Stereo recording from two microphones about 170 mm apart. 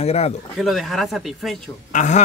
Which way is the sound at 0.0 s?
40° left (ahead or behind).